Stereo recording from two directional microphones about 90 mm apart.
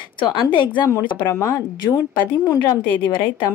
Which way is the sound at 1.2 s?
35° left (ahead or behind).